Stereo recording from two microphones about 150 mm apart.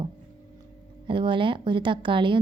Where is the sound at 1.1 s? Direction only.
35° right (ahead or behind).